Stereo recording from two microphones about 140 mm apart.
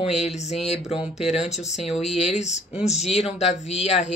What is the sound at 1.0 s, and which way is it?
Speech, 5° right (ahead or behind).